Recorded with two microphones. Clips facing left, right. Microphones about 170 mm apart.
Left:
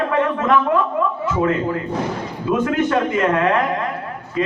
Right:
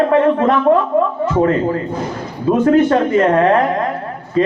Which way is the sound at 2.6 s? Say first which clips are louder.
Right 8 dB; 35° right (ahead or behind).